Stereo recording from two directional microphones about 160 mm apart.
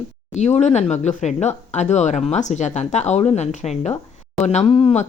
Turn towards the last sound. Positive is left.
turn(degrees=35)  # may be behind; listen again after turning